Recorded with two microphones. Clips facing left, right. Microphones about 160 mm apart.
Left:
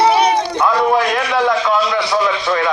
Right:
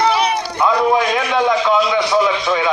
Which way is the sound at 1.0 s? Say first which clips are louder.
Even; centre (ahead or behind).